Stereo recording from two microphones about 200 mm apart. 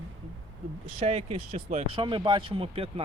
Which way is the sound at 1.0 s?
30° right (ahead or behind).